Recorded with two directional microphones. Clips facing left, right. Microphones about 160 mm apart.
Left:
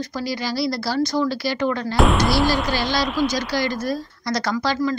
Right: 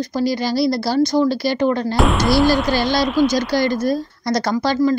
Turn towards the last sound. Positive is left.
turn(degrees=-45)  # may be behind; listen again after turning